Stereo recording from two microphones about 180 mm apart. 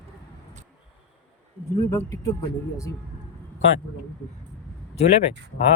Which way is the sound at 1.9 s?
15° left (ahead or behind).